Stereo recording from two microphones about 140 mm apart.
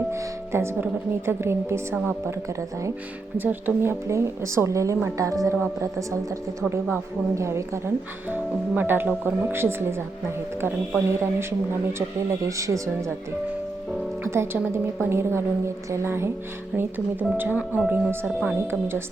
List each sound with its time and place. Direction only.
0.1 s speech: 20° right (ahead or behind)
3.3 s a woman's voice: 15° right (ahead or behind)
12.5 s a woman's voice: 20° right (ahead or behind)
14.3 s speech: 20° right (ahead or behind)